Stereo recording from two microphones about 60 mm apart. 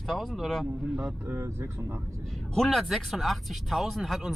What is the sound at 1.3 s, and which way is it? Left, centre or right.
Speech, right.